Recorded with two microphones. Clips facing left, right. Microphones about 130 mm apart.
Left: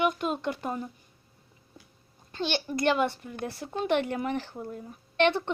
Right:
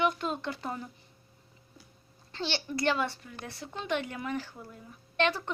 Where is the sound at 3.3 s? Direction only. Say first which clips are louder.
Left 7 dB; 50° left (ahead or behind).